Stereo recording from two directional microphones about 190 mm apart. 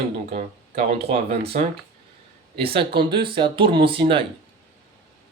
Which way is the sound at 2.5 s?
30° right (ahead or behind).